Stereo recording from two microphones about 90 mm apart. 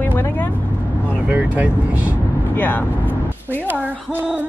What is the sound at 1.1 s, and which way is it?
A woman's voice, 15° right (ahead or behind).